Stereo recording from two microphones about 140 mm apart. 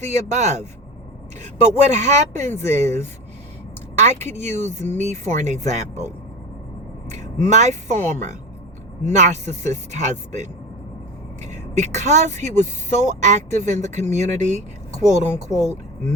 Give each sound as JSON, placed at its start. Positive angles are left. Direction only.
{"t": 0.0, "sound": "speech", "side_deg": -55}
{"t": 3.9, "sound": "speech", "side_deg": -55}
{"t": 7.1, "sound": "speech", "side_deg": -55}